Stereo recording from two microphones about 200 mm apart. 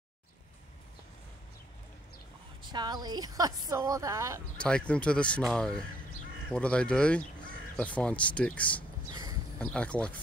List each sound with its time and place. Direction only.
2.6 s a woman's voice: 20° right (ahead or behind)
4.6 s speech: 5° left (ahead or behind)
9.1 s a sound: 20° right (ahead or behind)
9.6 s speech: 5° left (ahead or behind)